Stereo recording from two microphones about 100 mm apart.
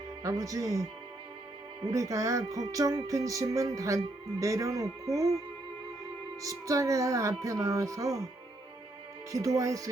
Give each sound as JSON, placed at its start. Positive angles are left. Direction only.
{"t": 0.2, "sound": "music", "side_deg": -35}
{"t": 6.4, "sound": "music", "side_deg": -35}
{"t": 9.3, "sound": "music", "side_deg": -35}